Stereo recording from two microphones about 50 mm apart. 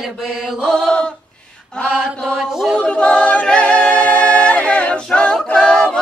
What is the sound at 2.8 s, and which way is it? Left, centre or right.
A capella, left.